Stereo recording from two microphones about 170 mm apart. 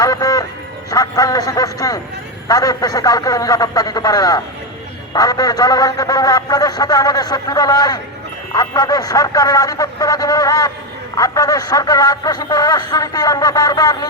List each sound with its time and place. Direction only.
0.0 s music: 20° left (ahead or behind)
2.5 s speech: 20° left (ahead or behind)